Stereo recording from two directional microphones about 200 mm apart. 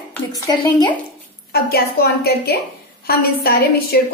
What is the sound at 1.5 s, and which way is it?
A woman's voice, 50° left (ahead or behind).